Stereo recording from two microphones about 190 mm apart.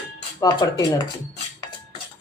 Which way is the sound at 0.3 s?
20° left (ahead or behind).